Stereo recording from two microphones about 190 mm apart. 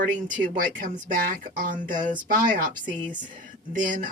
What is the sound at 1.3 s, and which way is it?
Speech, 45° right (ahead or behind).